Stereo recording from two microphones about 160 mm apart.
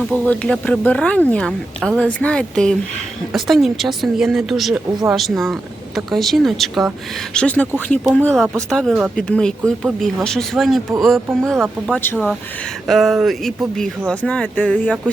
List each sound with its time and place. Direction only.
0.1 s speech: 5° left (ahead or behind)
12.9 s speech: centre (ahead or behind)